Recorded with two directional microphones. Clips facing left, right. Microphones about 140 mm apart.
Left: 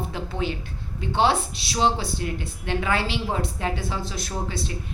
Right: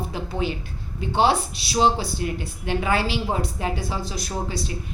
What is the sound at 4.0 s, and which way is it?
Speech, 25° left (ahead or behind).